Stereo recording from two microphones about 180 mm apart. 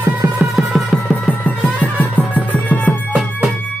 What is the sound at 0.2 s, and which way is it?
Music, 15° right (ahead or behind).